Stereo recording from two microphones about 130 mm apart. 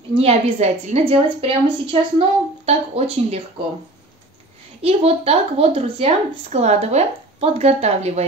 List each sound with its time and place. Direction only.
0.1 s a woman's voice: 50° right (ahead or behind)
4.8 s a woman's voice: 50° right (ahead or behind)